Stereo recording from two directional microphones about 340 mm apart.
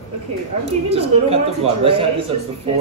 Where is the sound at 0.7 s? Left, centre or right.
Centre.